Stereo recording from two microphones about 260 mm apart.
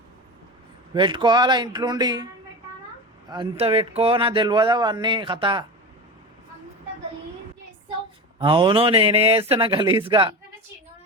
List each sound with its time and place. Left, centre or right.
0.9 s speech: centre
8.4 s speech: centre